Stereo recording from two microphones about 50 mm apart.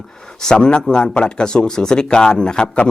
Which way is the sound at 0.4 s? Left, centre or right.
Centre.